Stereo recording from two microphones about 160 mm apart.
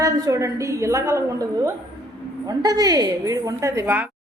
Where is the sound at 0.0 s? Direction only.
20° right (ahead or behind).